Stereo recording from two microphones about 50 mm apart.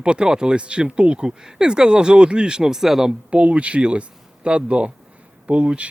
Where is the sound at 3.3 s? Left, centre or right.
Right.